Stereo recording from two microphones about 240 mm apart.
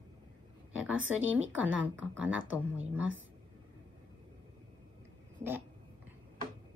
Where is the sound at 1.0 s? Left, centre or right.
Right.